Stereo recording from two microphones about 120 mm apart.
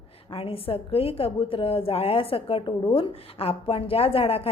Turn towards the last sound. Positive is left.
turn(degrees=55)  # may be behind; listen again after turning